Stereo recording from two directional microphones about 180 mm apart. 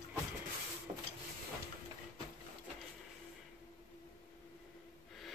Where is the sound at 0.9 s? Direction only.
30° right (ahead or behind).